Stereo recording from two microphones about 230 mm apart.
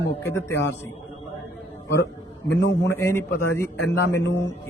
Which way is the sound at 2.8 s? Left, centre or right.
Centre.